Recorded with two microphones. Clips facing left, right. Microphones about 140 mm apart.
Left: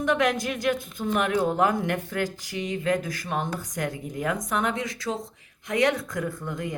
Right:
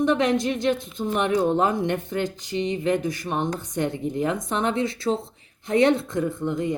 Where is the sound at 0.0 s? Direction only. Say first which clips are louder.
Right 3 dB; 25° right (ahead or behind).